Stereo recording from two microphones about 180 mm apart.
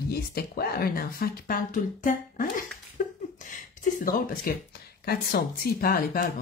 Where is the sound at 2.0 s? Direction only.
50° left (ahead or behind).